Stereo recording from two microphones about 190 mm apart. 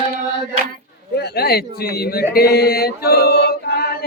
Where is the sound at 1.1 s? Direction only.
60° left (ahead or behind).